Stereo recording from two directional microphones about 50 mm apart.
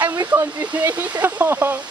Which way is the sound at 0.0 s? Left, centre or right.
Right.